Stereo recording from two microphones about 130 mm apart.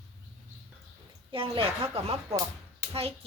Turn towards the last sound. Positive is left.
turn(degrees=-50)  # may be behind; listen again after turning